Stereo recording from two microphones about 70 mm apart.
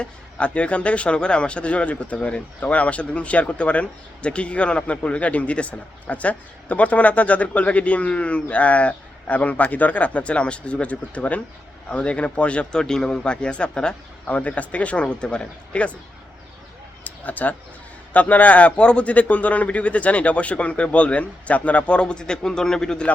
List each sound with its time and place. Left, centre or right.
0.0 s a man's voice: centre
17.0 s a sound: left
18.1 s a man's voice: left